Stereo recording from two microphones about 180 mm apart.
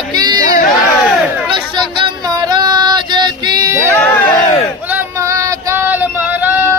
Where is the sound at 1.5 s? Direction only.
25° right (ahead or behind).